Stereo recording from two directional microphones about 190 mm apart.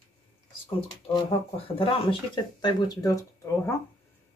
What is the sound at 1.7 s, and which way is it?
Speech, 25° left (ahead or behind).